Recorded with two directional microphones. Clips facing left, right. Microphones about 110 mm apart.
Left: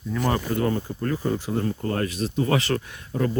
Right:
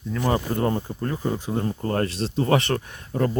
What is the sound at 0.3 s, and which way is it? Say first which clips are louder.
Speech: right 1 dB; 30° right (ahead or behind).